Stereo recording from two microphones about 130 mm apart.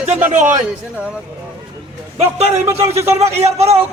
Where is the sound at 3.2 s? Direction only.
55° right (ahead or behind).